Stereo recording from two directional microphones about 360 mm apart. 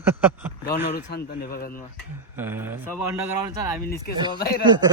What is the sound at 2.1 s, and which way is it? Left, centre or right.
Speech, centre.